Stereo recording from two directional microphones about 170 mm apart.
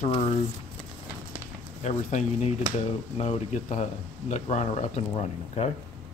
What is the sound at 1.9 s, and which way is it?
Speech, 40° left (ahead or behind).